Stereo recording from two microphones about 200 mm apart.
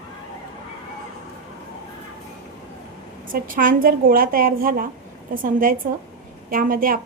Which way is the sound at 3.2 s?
45° right (ahead or behind).